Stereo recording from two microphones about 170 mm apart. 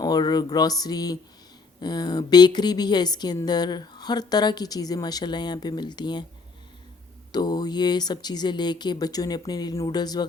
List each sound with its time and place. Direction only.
0.0 s speech: 25° left (ahead or behind)
7.3 s speech: 25° left (ahead or behind)